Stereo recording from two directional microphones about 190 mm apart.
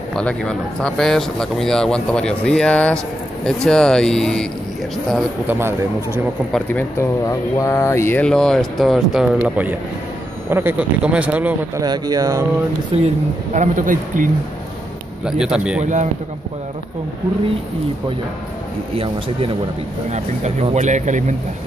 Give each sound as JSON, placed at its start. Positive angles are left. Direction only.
{"t": 0.1, "sound": "speech", "side_deg": 5}
{"t": 5.5, "sound": "speech", "side_deg": -10}
{"t": 6.5, "sound": "speech", "side_deg": 10}
{"t": 11.8, "sound": "speech", "side_deg": -20}
{"t": 12.9, "sound": "speech", "side_deg": -35}
{"t": 15.2, "sound": "speech", "side_deg": -5}
{"t": 15.8, "sound": "speech", "side_deg": -40}
{"t": 18.9, "sound": "speech", "side_deg": -30}